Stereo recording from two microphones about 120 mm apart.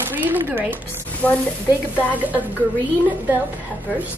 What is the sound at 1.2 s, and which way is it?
Speech, 10° left (ahead or behind).